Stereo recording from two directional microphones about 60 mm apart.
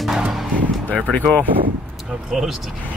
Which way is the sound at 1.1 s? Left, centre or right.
Left.